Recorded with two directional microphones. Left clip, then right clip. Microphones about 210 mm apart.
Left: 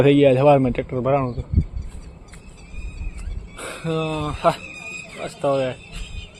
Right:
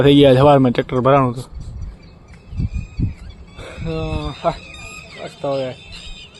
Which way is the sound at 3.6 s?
5° left (ahead or behind).